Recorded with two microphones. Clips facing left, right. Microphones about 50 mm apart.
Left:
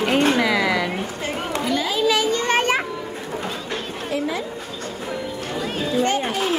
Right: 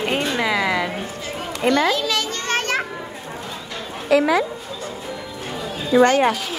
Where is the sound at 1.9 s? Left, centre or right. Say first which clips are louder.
Left 4 dB; centre.